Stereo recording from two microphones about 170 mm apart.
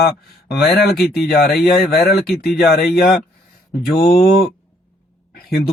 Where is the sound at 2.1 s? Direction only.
65° left (ahead or behind).